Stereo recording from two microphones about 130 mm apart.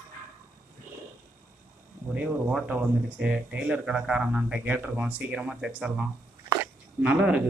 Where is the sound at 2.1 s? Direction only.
10° right (ahead or behind).